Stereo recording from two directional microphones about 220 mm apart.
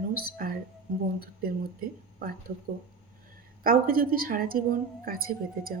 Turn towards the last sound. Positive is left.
turn(degrees=-40)  # may be behind; listen again after turning